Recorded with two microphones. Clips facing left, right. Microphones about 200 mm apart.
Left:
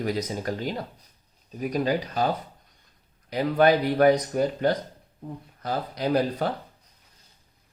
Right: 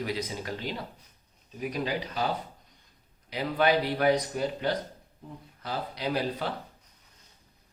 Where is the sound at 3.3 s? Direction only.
45° left (ahead or behind).